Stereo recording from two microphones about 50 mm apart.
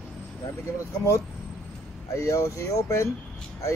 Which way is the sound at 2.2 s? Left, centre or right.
Left.